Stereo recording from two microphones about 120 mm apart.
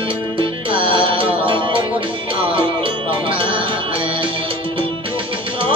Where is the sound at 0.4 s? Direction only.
45° right (ahead or behind).